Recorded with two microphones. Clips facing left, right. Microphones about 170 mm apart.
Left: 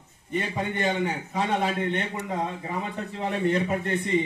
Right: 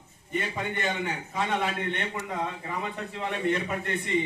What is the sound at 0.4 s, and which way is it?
A man's voice, 35° left (ahead or behind).